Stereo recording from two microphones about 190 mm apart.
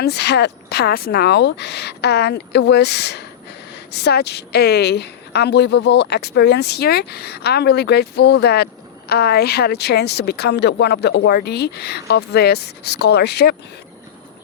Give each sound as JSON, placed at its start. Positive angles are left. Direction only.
{"t": 0.0, "sound": "a woman's voice", "side_deg": 60}